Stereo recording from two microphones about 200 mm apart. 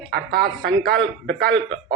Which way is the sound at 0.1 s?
50° right (ahead or behind).